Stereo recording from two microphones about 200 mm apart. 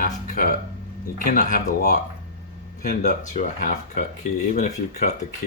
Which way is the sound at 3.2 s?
40° left (ahead or behind).